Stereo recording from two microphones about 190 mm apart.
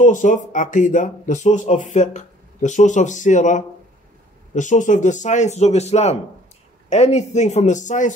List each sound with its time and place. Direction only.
0.0 s speech: 40° left (ahead or behind)